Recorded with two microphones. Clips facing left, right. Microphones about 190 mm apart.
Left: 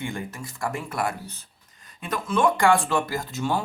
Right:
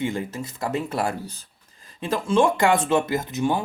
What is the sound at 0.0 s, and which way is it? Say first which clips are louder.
Speech: right 5 dB; 25° right (ahead or behind).